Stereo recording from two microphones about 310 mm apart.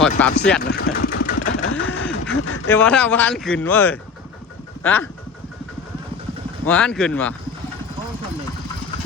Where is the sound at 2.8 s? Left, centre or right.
Centre.